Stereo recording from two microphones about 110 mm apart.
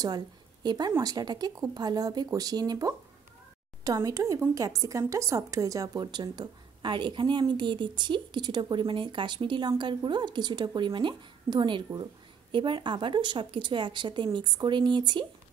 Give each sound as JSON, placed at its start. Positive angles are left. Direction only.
{"t": 0.7, "sound": "speech", "side_deg": -40}